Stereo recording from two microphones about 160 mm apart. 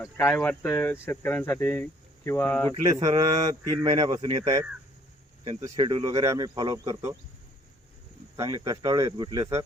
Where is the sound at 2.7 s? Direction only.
25° right (ahead or behind).